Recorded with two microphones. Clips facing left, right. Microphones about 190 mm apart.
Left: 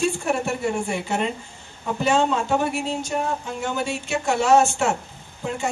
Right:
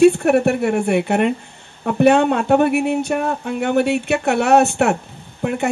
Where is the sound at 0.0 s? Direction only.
65° right (ahead or behind).